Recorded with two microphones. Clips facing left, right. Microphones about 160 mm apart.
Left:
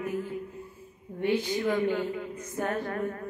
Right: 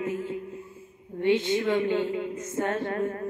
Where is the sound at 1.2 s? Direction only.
25° right (ahead or behind).